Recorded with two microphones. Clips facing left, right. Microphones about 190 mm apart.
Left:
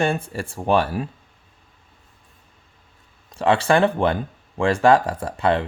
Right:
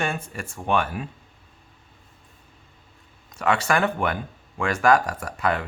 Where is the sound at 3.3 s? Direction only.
30° left (ahead or behind).